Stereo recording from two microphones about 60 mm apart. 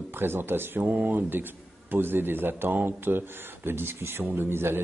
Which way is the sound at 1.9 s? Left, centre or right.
Right.